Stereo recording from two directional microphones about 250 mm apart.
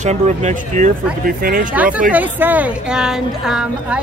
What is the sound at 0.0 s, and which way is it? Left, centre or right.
Speech, right.